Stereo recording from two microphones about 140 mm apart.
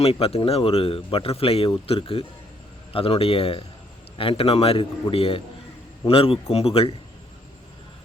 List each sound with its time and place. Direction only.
0.0 s speech: 45° left (ahead or behind)